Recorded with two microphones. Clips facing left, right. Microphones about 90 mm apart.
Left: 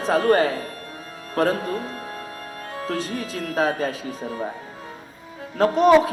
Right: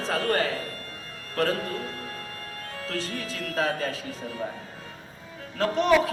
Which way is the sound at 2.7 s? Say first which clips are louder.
Left 6 dB; 20° left (ahead or behind).